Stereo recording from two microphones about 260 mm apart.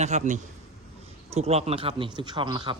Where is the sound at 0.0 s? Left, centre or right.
Right.